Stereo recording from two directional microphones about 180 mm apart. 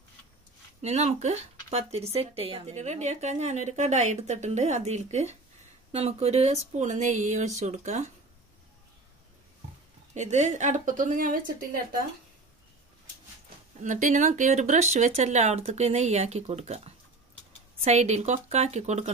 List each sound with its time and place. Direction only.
0.8 s speech: 40° right (ahead or behind)
10.1 s a woman's voice: 40° right (ahead or behind)
13.7 s speech: 45° right (ahead or behind)